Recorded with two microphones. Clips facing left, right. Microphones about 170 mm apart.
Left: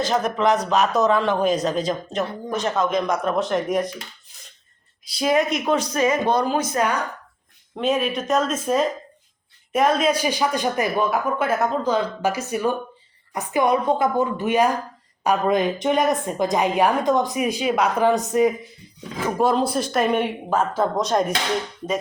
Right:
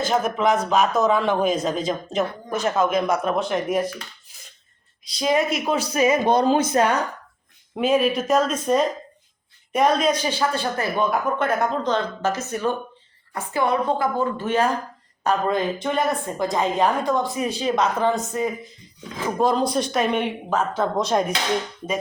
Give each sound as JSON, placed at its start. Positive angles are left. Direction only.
{"t": 0.0, "sound": "speech", "side_deg": 0}
{"t": 5.0, "sound": "speech", "side_deg": 5}
{"t": 6.3, "sound": "speech", "side_deg": -20}
{"t": 7.8, "sound": "speech", "side_deg": 0}
{"t": 19.4, "sound": "speech", "side_deg": 5}